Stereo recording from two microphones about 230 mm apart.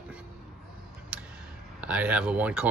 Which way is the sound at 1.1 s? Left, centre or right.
Centre.